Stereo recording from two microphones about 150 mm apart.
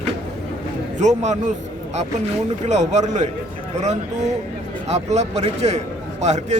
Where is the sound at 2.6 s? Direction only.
50° right (ahead or behind).